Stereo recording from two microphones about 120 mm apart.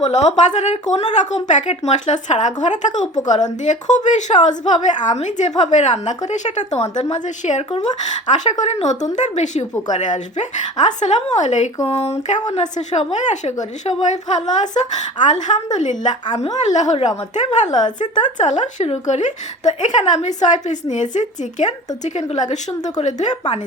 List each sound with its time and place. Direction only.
0.0 s a woman's voice: 70° left (ahead or behind)
4.8 s speech: 90° left; by 7.6 s 70° left (ahead or behind)
7.7 s speech: 50° left (ahead or behind)
8.3 s speech: 75° left (ahead or behind)
9.9 s a woman's voice: 90° left
11.9 s a sound: 60° left (ahead or behind)
12.5 s a woman's voice: 70° left (ahead or behind)
17.7 s speech: 35° left (ahead or behind)
18.2 s a woman's voice: 85° left